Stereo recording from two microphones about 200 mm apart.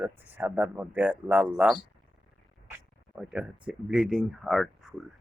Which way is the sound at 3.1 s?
5° right (ahead or behind).